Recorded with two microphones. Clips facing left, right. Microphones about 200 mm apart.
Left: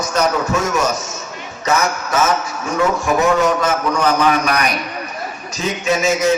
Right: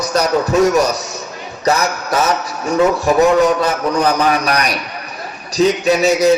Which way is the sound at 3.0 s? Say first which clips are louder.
Right 4 dB; 35° right (ahead or behind).